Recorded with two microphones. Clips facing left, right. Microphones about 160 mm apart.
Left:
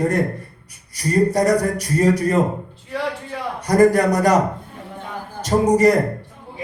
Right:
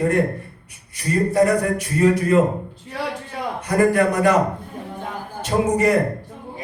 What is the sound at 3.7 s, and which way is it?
A man's voice, 40° left (ahead or behind).